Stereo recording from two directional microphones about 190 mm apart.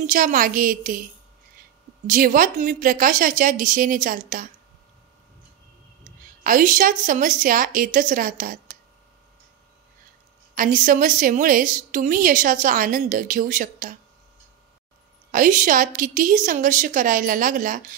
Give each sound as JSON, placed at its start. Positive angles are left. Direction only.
{"t": 0.0, "sound": "a woman's voice", "side_deg": -45}
{"t": 2.0, "sound": "a woman's voice", "side_deg": -45}
{"t": 6.4, "sound": "a woman's voice", "side_deg": -45}
{"t": 10.5, "sound": "a woman's voice", "side_deg": -45}
{"t": 15.3, "sound": "a woman's voice", "side_deg": -45}